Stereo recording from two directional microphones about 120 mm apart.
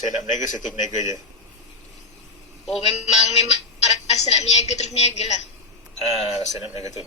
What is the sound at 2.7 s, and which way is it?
A woman's voice, 65° left (ahead or behind).